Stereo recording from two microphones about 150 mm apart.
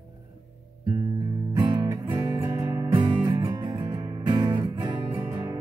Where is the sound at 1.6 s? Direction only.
25° right (ahead or behind).